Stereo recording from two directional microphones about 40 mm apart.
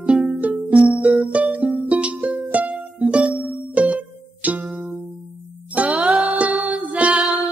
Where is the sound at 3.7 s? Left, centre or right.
Right.